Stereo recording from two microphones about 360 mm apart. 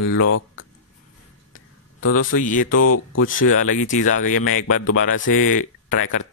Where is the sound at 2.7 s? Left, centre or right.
Left.